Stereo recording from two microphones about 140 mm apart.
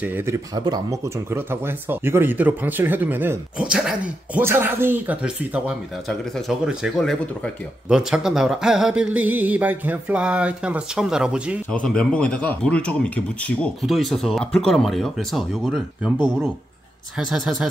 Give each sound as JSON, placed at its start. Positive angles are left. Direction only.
{"t": 0.0, "sound": "speech", "side_deg": -15}
{"t": 0.6, "sound": "speech", "side_deg": -25}
{"t": 11.7, "sound": "speech", "side_deg": 5}